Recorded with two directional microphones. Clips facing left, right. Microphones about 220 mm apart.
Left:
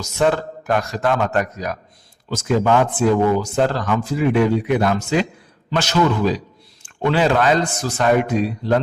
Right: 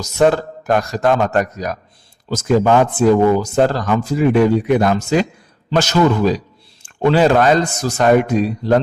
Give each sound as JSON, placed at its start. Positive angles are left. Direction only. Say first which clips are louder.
{"t": 0.2, "sound": "speech", "louder": "right 4 dB", "side_deg": -45}